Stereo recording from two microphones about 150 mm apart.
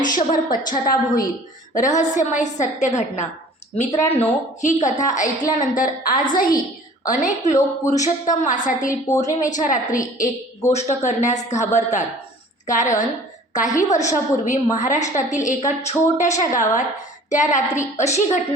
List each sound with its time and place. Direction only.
0.0 s a woman's voice: 60° left (ahead or behind)
1.7 s a woman's voice: 55° left (ahead or behind)
10.7 s a woman's voice: 50° left (ahead or behind)